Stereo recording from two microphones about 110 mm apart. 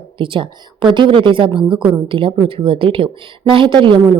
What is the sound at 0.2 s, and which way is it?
Speech, 50° right (ahead or behind).